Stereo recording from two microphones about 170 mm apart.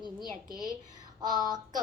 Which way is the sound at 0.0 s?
25° left (ahead or behind).